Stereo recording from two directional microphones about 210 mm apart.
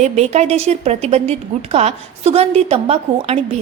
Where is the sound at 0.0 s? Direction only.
30° right (ahead or behind).